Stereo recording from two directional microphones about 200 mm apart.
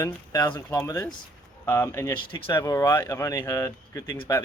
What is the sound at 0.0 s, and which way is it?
Speech, 20° left (ahead or behind).